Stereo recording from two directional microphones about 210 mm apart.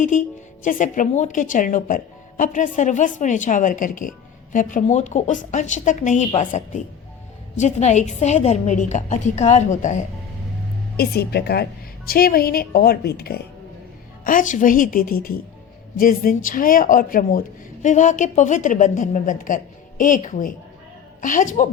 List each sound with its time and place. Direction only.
0.6 s a woman's voice: 40° left (ahead or behind)
10.9 s a woman's voice: 50° left (ahead or behind)